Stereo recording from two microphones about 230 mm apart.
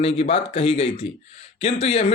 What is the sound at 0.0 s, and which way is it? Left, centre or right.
Speech, left.